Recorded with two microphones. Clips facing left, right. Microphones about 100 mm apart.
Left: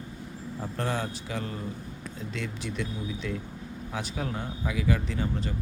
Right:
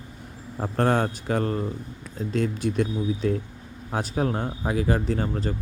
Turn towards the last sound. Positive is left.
turn(degrees=-45)  # may be behind; listen again after turning